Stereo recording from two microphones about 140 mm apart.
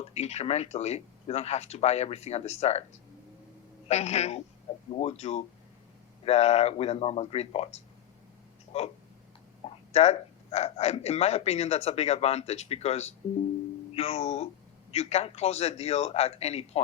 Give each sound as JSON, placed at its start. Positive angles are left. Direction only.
{"t": 0.0, "sound": "speech", "side_deg": 50}
{"t": 3.8, "sound": "speech", "side_deg": 50}
{"t": 9.9, "sound": "speech", "side_deg": 50}